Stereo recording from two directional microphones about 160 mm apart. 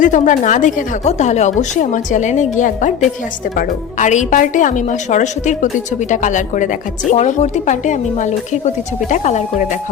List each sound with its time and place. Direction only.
0.0 s speech: 50° left (ahead or behind)